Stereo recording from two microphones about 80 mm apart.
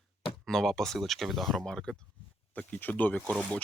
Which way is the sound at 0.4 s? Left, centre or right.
Centre.